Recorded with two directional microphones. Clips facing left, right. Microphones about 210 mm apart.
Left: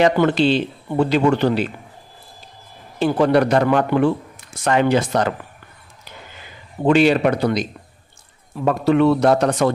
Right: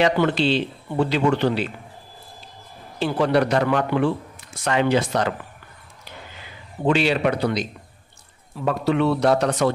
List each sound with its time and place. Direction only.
0.0 s speech: 45° left (ahead or behind)
3.0 s speech: 50° left (ahead or behind)
6.9 s speech: 50° left (ahead or behind)
8.6 s speech: 50° left (ahead or behind)